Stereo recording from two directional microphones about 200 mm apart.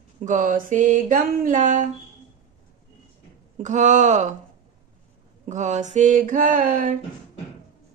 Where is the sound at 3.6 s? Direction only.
35° right (ahead or behind).